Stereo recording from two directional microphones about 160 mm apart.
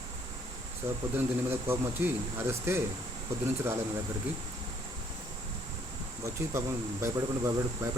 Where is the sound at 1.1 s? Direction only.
15° right (ahead or behind).